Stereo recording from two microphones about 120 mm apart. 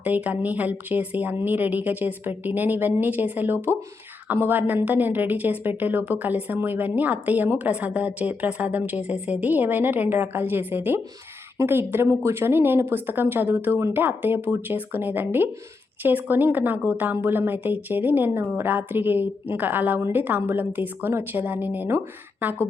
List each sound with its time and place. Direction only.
0.0 s a woman's voice: 15° right (ahead or behind)